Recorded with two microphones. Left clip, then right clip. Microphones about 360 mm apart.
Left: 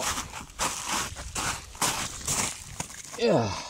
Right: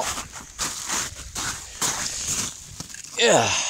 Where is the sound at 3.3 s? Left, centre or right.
Right.